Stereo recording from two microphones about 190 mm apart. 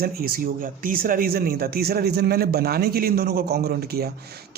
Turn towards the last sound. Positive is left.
turn(degrees=-55)  # may be behind; listen again after turning